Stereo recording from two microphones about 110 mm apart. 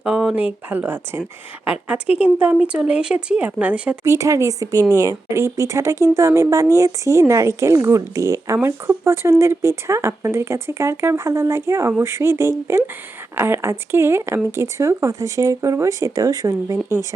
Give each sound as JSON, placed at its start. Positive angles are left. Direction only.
{"t": 0.0, "sound": "speech", "side_deg": -10}
{"t": 4.0, "sound": "a woman's voice", "side_deg": -25}